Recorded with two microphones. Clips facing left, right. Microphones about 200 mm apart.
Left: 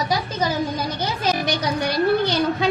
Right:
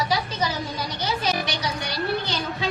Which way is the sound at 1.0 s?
50° left (ahead or behind).